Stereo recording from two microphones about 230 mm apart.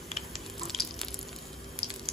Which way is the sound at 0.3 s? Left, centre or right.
Centre.